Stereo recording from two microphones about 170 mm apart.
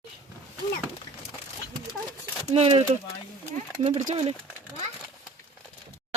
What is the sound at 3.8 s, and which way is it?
Speech, 45° right (ahead or behind).